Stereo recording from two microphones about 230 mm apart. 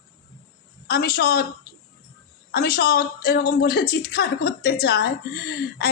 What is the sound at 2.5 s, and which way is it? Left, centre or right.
Speech, left.